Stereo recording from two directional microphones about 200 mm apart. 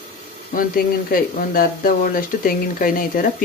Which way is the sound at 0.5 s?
45° left (ahead or behind).